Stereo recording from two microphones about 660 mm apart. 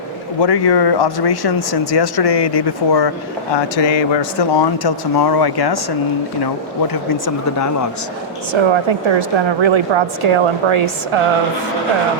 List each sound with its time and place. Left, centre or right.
0.3 s speech: left
8.5 s a woman's voice: right